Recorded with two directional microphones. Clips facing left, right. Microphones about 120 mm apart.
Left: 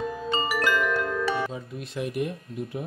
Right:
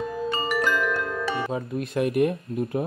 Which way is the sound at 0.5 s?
5° left (ahead or behind).